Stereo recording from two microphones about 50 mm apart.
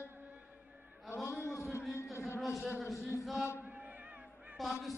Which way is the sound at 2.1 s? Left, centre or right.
Left.